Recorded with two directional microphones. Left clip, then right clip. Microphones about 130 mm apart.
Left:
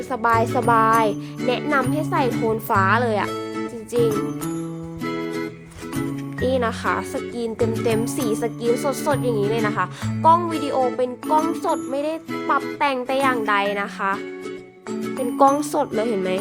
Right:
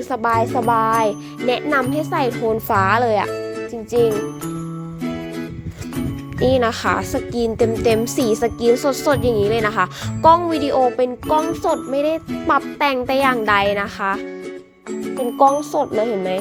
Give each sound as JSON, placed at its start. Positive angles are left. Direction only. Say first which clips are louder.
{"t": 0.3, "sound": "speech", "louder": "right 1 dB", "side_deg": 0}
{"t": 1.5, "sound": "speech", "louder": "right 3 dB", "side_deg": -30}
{"t": 6.4, "sound": "speech", "louder": "right 5 dB", "side_deg": -35}
{"t": 15.1, "sound": "speech", "louder": "right 2 dB", "side_deg": 0}